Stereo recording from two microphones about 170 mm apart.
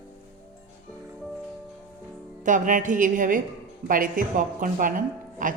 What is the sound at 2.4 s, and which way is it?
A woman's voice, 50° right (ahead or behind).